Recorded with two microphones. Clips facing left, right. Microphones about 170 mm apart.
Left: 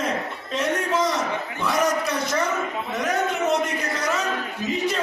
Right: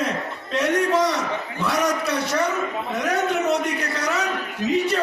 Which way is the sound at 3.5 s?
65° right (ahead or behind).